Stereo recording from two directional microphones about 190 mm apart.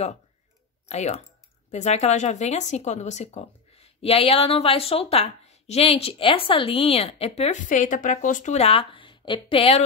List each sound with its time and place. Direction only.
0.8 s speech: 35° left (ahead or behind)